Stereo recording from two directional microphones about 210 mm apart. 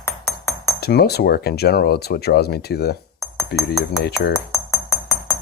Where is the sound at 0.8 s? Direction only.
50° left (ahead or behind).